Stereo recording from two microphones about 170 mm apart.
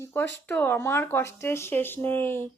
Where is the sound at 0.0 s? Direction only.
10° left (ahead or behind).